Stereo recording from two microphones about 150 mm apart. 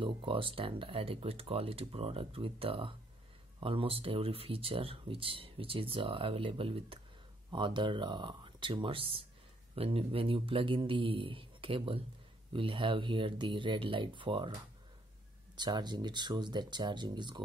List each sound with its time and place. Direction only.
0.0 s speech: 35° right (ahead or behind)